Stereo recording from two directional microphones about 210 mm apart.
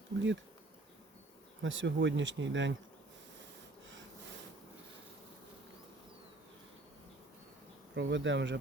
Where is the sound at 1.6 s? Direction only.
60° right (ahead or behind).